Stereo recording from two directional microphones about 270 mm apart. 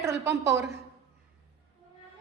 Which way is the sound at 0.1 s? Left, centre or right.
Right.